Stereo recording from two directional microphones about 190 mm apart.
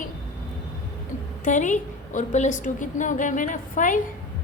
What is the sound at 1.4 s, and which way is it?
A woman's voice, 40° left (ahead or behind).